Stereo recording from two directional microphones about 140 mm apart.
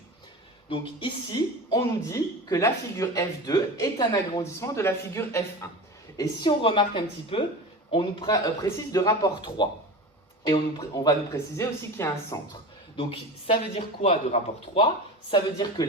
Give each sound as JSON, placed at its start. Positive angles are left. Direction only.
{"t": 0.7, "sound": "a woman's voice", "side_deg": 35}
{"t": 6.1, "sound": "a woman's voice", "side_deg": 35}
{"t": 8.9, "sound": "a woman's voice", "side_deg": 25}
{"t": 13.0, "sound": "a woman's voice", "side_deg": 40}
{"t": 14.0, "sound": "a man's voice", "side_deg": 55}
{"t": 15.3, "sound": "a woman's voice", "side_deg": 30}